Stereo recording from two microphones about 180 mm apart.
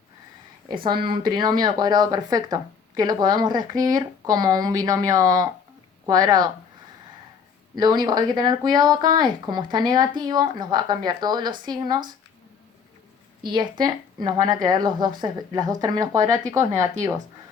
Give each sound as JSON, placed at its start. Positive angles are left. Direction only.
{"t": 0.7, "sound": "speech", "side_deg": -25}
{"t": 7.8, "sound": "speech", "side_deg": -20}
{"t": 13.4, "sound": "speech", "side_deg": -25}